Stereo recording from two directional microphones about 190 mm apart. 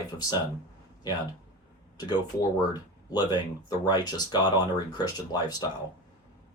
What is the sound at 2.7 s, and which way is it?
Speech, 20° left (ahead or behind).